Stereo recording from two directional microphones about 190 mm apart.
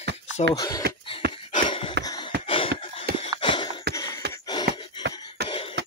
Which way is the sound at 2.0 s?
20° left (ahead or behind).